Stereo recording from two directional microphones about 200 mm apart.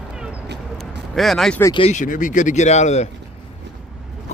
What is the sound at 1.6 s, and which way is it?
Speech, 25° left (ahead or behind).